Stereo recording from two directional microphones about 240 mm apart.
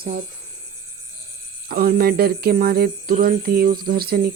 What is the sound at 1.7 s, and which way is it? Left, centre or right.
Speech, right.